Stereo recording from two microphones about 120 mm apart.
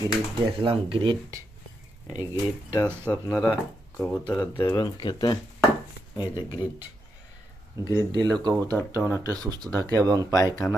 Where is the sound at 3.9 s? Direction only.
10° left (ahead or behind).